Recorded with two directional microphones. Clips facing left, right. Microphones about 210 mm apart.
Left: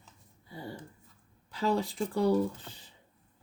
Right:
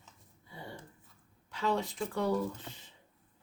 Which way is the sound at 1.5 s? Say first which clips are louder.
Left 3 dB; 35° left (ahead or behind).